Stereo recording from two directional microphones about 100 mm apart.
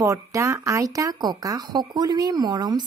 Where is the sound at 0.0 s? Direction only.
30° right (ahead or behind).